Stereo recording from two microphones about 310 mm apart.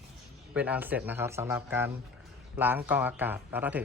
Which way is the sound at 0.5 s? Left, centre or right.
Centre.